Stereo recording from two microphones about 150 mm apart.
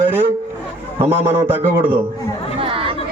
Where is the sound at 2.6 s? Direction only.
35° right (ahead or behind).